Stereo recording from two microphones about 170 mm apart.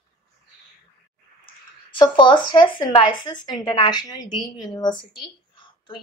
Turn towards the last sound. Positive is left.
turn(degrees=30)  # may be behind; listen again after turning